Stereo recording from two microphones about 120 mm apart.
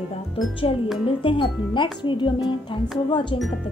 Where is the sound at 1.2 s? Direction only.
45° left (ahead or behind).